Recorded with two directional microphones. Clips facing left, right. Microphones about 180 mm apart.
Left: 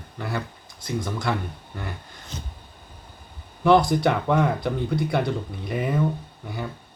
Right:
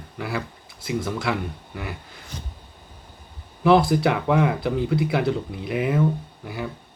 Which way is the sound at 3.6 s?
5° right (ahead or behind).